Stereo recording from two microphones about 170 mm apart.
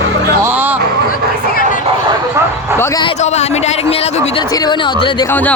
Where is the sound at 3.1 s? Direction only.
40° left (ahead or behind).